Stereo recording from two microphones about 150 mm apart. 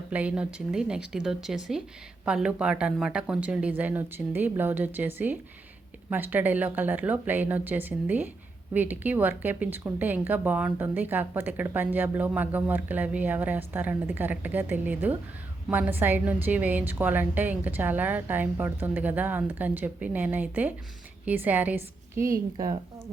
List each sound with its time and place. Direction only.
0.1 s speech: 10° right (ahead or behind); by 22.8 s 25° right (ahead or behind)